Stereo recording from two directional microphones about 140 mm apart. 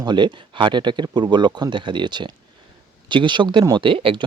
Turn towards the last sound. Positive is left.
turn(degrees=-40)  # may be behind; listen again after turning